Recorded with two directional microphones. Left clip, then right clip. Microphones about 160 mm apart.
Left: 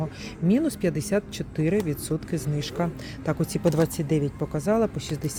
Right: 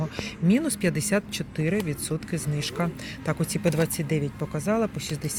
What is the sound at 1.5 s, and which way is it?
Speech, 25° left (ahead or behind).